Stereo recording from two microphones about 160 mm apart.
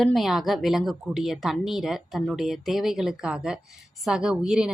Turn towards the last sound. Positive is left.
turn(degrees=-5)  # may be behind; listen again after turning